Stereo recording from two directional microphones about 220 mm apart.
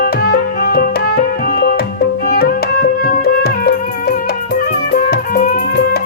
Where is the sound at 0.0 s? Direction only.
45° left (ahead or behind).